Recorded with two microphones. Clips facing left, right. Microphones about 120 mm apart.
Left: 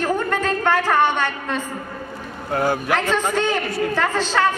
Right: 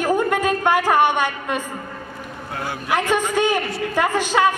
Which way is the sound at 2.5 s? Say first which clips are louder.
Left 9 dB; 45° left (ahead or behind).